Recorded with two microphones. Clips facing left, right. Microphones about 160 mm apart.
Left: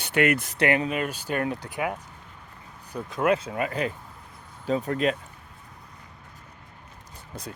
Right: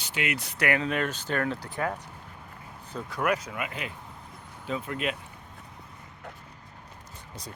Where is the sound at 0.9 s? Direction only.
10° left (ahead or behind); by 5.1 s 40° left (ahead or behind).